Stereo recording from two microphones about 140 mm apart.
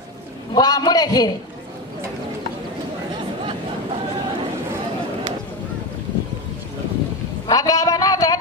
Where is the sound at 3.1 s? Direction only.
35° right (ahead or behind).